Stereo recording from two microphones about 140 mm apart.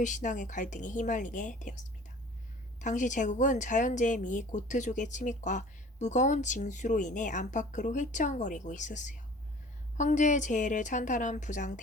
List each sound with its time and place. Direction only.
0.0 s a woman's voice: 65° left (ahead or behind)